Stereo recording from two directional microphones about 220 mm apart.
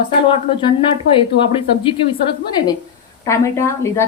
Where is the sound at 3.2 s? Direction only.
15° left (ahead or behind).